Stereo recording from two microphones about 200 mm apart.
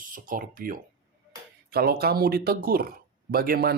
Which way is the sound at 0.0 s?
45° right (ahead or behind).